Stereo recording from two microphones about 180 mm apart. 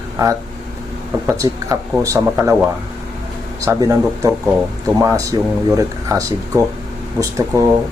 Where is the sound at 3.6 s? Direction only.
15° right (ahead or behind).